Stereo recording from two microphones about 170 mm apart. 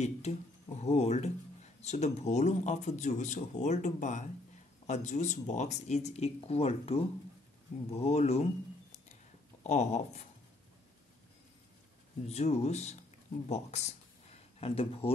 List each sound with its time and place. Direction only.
0.0 s speech: 40° left (ahead or behind)
9.6 s speech: 40° left (ahead or behind)
12.3 s speech: 40° left (ahead or behind)